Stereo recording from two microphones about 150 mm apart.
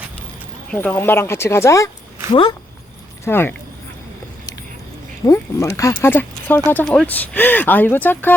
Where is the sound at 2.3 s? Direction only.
35° left (ahead or behind).